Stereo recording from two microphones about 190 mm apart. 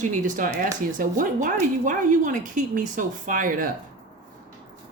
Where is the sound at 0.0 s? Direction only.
40° right (ahead or behind).